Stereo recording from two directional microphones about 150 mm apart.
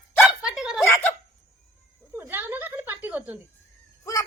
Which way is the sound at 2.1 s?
15° right (ahead or behind).